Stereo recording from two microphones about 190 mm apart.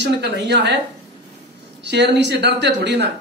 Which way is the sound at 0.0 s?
65° right (ahead or behind).